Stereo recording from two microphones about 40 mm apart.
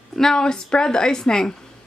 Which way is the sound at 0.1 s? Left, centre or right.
Centre.